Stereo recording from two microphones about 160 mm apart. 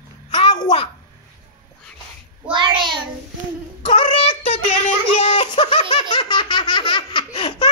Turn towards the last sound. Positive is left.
turn(degrees=35)  # may be behind; listen again after turning